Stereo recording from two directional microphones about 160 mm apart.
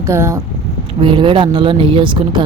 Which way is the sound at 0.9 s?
30° right (ahead or behind).